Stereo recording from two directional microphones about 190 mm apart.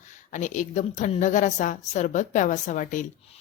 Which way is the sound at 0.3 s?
40° left (ahead or behind).